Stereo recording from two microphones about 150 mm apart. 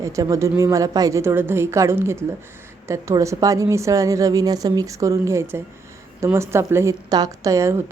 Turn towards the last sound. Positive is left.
turn(degrees=-20)  # may be behind; listen again after turning